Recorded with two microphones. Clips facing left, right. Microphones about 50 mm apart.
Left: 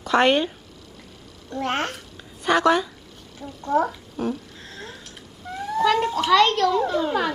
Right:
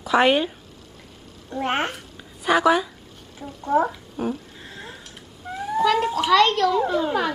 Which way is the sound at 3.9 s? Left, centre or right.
Centre.